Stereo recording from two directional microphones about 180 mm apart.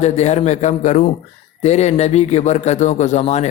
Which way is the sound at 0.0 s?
40° left (ahead or behind).